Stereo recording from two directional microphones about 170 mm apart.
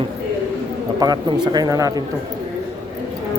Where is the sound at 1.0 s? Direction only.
25° right (ahead or behind).